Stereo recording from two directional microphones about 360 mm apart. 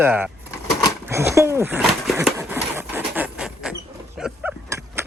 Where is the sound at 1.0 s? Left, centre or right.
Centre.